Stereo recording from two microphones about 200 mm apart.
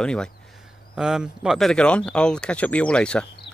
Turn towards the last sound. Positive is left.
turn(degrees=5)  # may be behind; listen again after turning